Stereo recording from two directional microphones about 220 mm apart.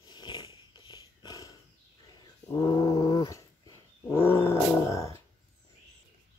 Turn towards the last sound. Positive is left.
turn(degrees=15)  # may be behind; listen again after turning